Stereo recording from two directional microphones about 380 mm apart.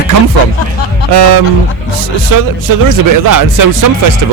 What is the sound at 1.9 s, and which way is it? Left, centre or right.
Speech, right.